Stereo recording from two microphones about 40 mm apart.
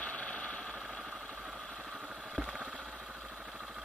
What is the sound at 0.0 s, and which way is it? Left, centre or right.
Vehicle, left.